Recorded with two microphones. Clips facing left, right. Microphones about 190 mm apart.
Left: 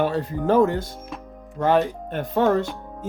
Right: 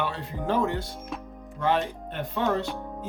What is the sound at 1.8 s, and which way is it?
Speech, 45° left (ahead or behind).